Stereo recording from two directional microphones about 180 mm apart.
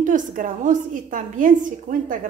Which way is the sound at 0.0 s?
45° right (ahead or behind).